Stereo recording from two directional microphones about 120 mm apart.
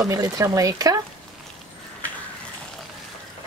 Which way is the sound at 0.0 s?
30° right (ahead or behind).